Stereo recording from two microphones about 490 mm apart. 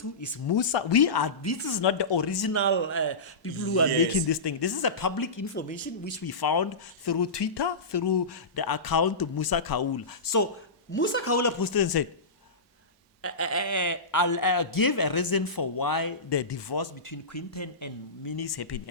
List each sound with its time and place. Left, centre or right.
0.4 s speech: left
2.5 s speech: left
4.3 s speech: left
10.9 s speech: left
13.2 s speech: left
17.1 s speech: left
18.3 s speech: left